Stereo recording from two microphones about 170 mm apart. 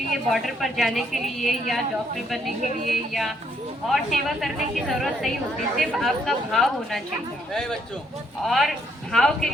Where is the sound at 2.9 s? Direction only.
Centre (ahead or behind).